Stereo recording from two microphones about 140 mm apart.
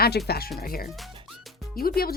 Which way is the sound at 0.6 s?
90° left.